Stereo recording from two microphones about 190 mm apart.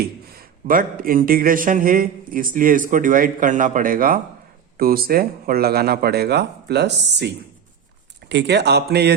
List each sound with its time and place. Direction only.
0.0 s a man's voice: 50° right (ahead or behind)
8.3 s speech: 65° right (ahead or behind)